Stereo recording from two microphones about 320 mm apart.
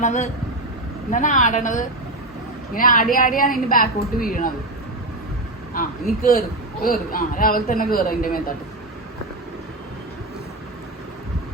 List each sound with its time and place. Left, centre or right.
0.0 s a woman's voice: left
5.7 s a woman's voice: left